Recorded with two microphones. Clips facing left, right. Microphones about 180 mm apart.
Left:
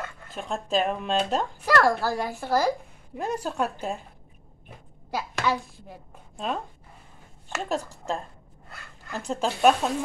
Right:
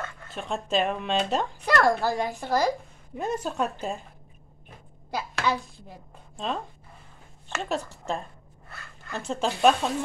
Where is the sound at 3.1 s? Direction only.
Centre (ahead or behind).